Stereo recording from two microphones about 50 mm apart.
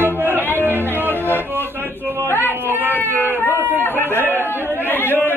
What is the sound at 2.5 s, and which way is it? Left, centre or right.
Cat, right.